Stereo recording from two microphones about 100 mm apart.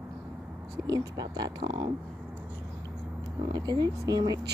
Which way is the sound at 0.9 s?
40° right (ahead or behind).